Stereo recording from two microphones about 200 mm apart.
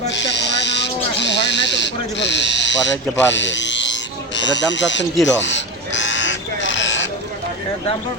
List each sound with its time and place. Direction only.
0.1 s owl: 60° left (ahead or behind)
5.2 s crow: 65° left (ahead or behind)